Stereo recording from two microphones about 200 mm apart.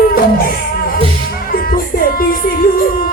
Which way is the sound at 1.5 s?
45° left (ahead or behind).